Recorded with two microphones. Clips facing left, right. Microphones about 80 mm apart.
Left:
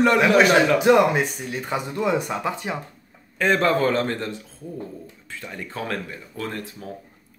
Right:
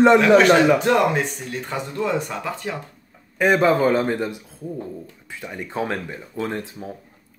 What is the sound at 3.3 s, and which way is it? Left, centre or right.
A man's voice, centre.